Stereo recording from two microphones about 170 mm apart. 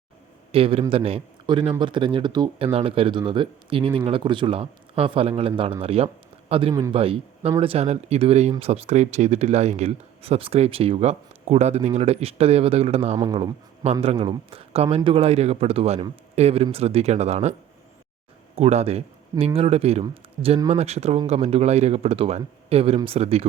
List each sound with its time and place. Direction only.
0.5 s speech: 35° right (ahead or behind)
13.1 s speech: 25° right (ahead or behind)
18.5 s speech: 40° right (ahead or behind)